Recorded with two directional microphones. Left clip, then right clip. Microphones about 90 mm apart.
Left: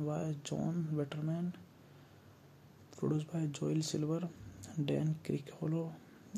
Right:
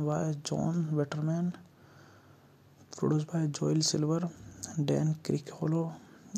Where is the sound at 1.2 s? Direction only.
40° right (ahead or behind).